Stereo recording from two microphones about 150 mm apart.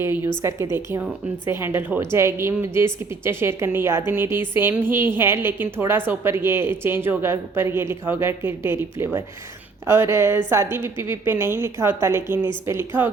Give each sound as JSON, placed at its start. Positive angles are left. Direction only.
{"t": 0.4, "sound": "a woman's voice", "side_deg": -20}